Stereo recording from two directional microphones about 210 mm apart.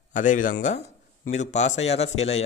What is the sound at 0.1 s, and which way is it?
A man's voice, 35° left (ahead or behind).